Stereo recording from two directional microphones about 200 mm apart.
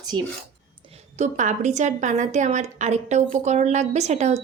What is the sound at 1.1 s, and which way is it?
A woman's voice, 35° right (ahead or behind).